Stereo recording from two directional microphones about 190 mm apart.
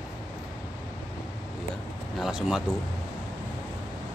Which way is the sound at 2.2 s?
5° right (ahead or behind).